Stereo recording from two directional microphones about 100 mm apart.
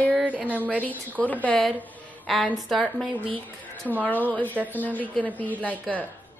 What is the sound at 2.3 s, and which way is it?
Speech, centre (ahead or behind).